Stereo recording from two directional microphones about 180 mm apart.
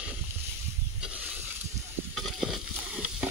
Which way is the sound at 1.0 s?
5° right (ahead or behind).